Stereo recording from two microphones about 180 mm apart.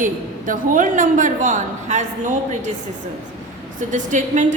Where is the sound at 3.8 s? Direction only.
45° right (ahead or behind).